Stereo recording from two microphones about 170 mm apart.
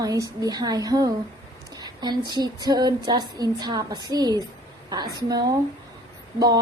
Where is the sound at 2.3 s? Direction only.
25° right (ahead or behind).